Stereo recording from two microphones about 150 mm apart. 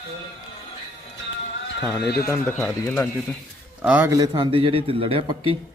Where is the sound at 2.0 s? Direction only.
90° left.